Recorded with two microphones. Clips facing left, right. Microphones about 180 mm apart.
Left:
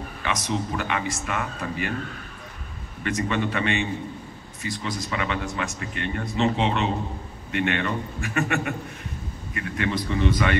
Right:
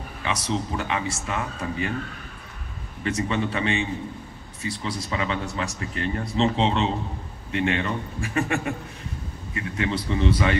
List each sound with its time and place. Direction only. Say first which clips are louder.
0.2 s speech: even; 30° right (ahead or behind)
3.0 s speech: even; 30° right (ahead or behind)